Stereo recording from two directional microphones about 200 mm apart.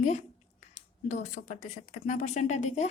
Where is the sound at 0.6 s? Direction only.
35° left (ahead or behind).